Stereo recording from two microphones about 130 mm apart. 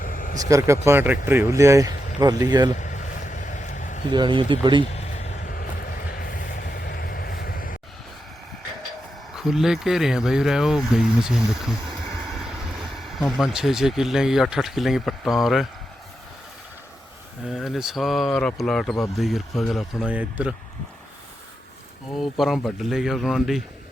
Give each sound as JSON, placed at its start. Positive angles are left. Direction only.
{"t": 0.0, "sound": "vehicle", "side_deg": 90}
{"t": 0.3, "sound": "speech", "side_deg": -25}
{"t": 2.7, "sound": "vehicle", "side_deg": 70}
{"t": 4.1, "sound": "speech", "side_deg": -40}
{"t": 4.9, "sound": "vehicle", "side_deg": 55}
{"t": 9.3, "sound": "speech", "side_deg": -5}
{"t": 17.4, "sound": "speech", "side_deg": 0}
{"t": 22.2, "sound": "speech", "side_deg": 0}